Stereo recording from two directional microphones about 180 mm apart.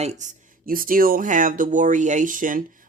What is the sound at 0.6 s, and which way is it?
Speech, 50° right (ahead or behind).